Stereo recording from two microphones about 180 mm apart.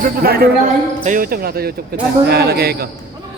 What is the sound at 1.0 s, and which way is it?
Speech, 50° right (ahead or behind).